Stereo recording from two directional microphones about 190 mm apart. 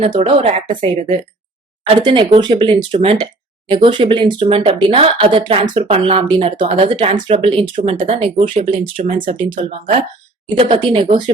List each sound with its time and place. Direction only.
0.0 s speech: 30° right (ahead or behind)
10.6 s speech: 25° right (ahead or behind)